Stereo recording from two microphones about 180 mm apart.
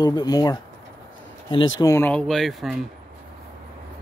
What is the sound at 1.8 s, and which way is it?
Speech, 10° left (ahead or behind).